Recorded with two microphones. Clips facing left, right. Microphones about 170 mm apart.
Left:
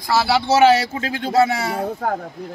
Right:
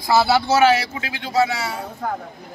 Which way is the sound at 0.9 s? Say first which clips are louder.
Left 4 dB; 45° left (ahead or behind).